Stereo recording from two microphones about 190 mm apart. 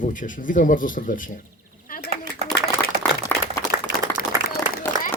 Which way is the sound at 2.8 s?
10° left (ahead or behind).